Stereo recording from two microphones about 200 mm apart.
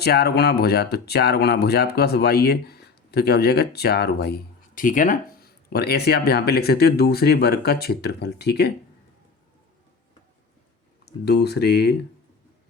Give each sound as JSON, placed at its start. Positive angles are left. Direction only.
{"t": 0.0, "sound": "speech", "side_deg": 55}
{"t": 11.0, "sound": "speech", "side_deg": 55}